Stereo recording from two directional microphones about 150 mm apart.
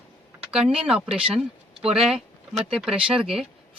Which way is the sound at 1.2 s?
40° right (ahead or behind).